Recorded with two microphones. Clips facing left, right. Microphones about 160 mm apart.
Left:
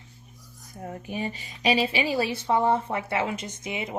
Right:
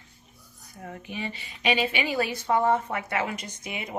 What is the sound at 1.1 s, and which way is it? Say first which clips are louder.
A woman's voice: left 3 dB; 40° left (ahead or behind).